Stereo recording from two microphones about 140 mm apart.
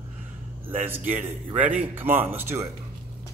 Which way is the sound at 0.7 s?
15° right (ahead or behind).